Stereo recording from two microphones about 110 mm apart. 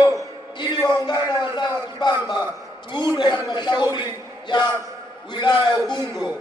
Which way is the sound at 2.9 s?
45° left (ahead or behind).